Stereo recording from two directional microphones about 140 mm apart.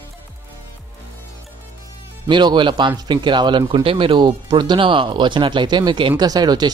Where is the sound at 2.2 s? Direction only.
35° right (ahead or behind).